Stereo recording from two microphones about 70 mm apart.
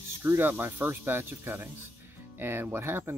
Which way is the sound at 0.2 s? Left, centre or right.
Right.